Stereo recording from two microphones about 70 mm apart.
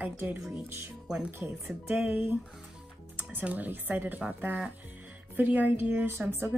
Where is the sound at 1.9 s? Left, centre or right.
Right.